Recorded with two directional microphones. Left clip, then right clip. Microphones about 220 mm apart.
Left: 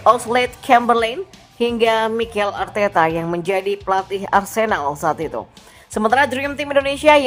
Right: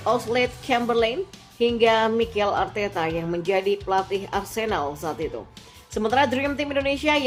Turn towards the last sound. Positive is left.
turn(degrees=25)  # may be behind; listen again after turning